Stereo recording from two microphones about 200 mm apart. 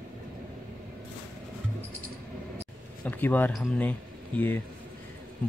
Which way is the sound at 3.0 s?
10° left (ahead or behind).